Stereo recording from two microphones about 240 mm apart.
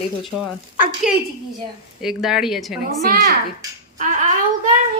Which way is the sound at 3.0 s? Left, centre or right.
Right.